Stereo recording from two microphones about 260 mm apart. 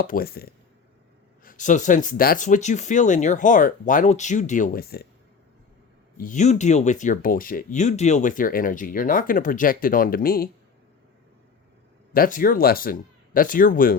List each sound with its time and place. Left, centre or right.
0.0 s speech: left
6.1 s speech: left
12.1 s speech: left